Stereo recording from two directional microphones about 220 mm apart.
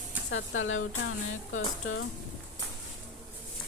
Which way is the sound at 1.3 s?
65° left (ahead or behind).